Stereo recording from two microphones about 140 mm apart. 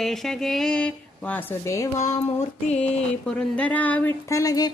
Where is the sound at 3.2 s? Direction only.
10° left (ahead or behind).